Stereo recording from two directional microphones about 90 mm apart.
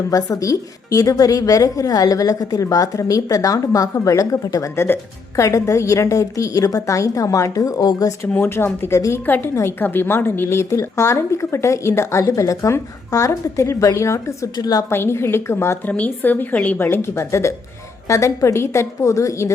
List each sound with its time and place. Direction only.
0.1 s a woman's voice: 40° left (ahead or behind)
8.4 s a woman's voice: 25° left (ahead or behind)
9.2 s a woman's voice: 20° left (ahead or behind)
14.5 s a woman's voice: 45° left (ahead or behind)
14.8 s speech: 25° left (ahead or behind)
15.9 s a woman's voice: 20° left (ahead or behind); by 19.5 s 35° left (ahead or behind)